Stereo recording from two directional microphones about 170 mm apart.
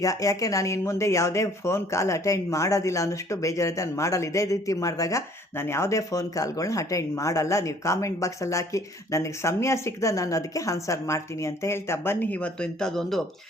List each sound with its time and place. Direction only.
0.0 s speech: 20° left (ahead or behind); by 13.2 s centre (ahead or behind)